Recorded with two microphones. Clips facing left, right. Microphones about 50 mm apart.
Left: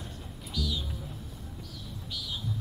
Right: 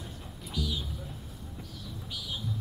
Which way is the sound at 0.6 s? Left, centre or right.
Centre.